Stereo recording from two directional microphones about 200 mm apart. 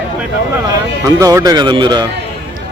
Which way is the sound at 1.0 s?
15° right (ahead or behind).